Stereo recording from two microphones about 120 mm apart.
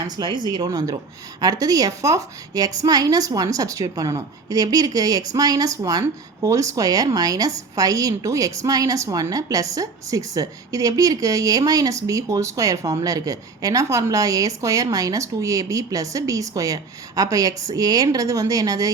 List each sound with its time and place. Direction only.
0.2 s a woman's voice: 35° right (ahead or behind)